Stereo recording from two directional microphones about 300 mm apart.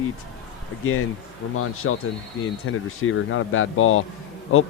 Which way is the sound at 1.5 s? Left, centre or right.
Left.